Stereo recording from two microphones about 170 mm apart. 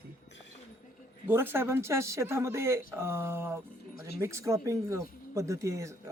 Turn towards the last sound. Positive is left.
turn(degrees=-15)  # may be behind; listen again after turning